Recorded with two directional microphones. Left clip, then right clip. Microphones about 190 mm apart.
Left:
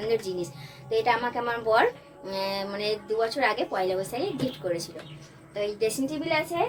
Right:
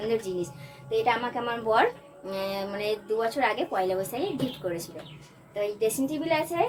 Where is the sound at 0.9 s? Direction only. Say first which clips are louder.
Left 1 dB; 10° right (ahead or behind).